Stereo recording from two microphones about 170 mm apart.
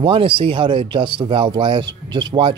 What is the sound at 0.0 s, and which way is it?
Speech, 30° right (ahead or behind).